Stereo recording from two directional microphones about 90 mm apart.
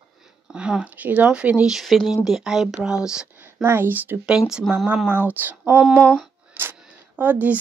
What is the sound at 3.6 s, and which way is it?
Speech, 25° right (ahead or behind).